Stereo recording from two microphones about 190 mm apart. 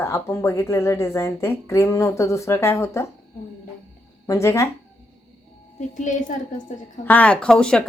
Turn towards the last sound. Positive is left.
turn(degrees=5)  # may be behind; listen again after turning